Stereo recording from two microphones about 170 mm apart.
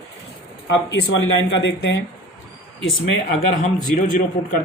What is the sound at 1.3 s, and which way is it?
Speech, 90° left.